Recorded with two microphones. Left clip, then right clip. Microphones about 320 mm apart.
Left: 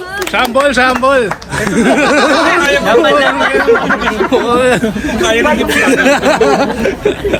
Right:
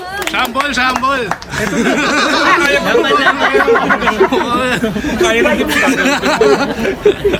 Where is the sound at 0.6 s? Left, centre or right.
Centre.